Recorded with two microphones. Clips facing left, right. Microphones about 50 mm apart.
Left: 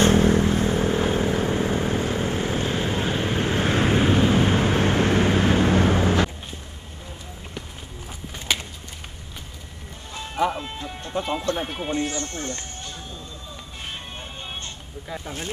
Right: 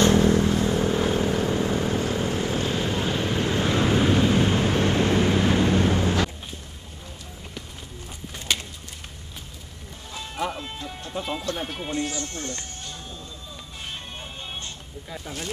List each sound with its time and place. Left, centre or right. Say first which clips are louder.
0.0 s vehicle: left 1 dB; left
10.1 s music: left 5 dB; centre
12.2 s speech: left 2 dB; left
12.4 s speech: left 2 dB; centre